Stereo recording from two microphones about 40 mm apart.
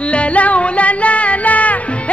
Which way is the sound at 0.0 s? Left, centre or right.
Left.